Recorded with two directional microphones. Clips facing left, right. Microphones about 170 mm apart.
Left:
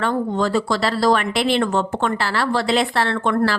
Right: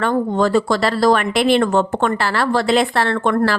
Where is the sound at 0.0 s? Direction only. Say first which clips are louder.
Right 3 dB; 55° right (ahead or behind).